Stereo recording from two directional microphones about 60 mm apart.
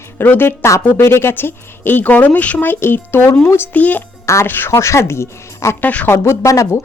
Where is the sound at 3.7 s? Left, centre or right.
Left.